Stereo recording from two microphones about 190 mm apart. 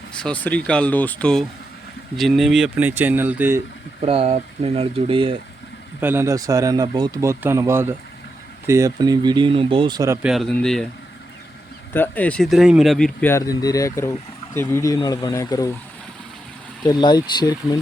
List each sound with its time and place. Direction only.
0.2 s speech: 5° left (ahead or behind); by 3.6 s 10° right (ahead or behind)
4.0 s speech: 30° right (ahead or behind)
6.0 s speech: 10° right (ahead or behind)
10.2 s speech: centre (ahead or behind)
11.9 s speech: 10° left (ahead or behind)
13.2 s speech: 15° left (ahead or behind)
16.8 s speech: 20° left (ahead or behind)